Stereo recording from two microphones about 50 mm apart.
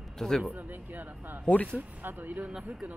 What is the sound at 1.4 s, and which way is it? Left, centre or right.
Speech, left.